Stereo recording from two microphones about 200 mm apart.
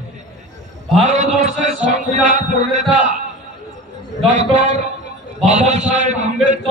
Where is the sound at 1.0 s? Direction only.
35° right (ahead or behind).